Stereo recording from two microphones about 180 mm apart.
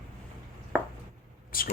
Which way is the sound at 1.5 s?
55° left (ahead or behind).